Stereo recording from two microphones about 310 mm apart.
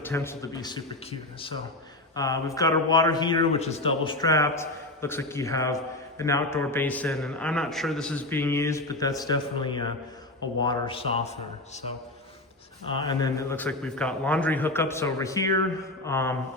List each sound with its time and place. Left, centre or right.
0.0 s a man's voice: centre
2.1 s a man's voice: centre
12.9 s a man's voice: centre